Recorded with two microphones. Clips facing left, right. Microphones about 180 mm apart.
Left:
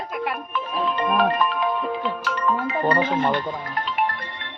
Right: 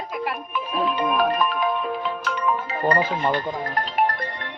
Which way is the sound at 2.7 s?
40° right (ahead or behind).